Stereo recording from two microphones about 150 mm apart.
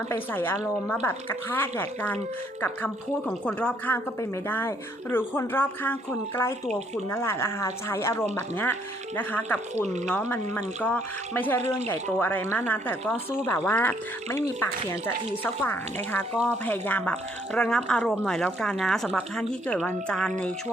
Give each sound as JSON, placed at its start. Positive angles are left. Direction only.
{"t": 0.1, "sound": "speech", "side_deg": 15}